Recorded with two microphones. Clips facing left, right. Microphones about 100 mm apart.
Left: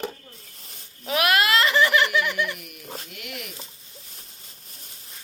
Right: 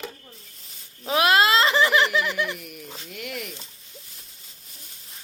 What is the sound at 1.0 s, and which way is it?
Giggle, 25° right (ahead or behind).